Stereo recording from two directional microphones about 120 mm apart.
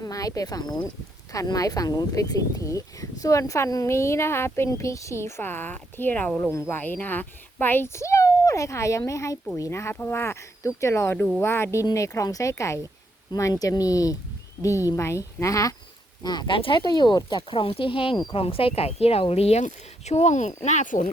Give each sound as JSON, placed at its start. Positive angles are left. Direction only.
{"t": 0.0, "sound": "speech", "side_deg": 30}
{"t": 18.4, "sound": "speech", "side_deg": 55}
{"t": 20.6, "sound": "speech", "side_deg": 85}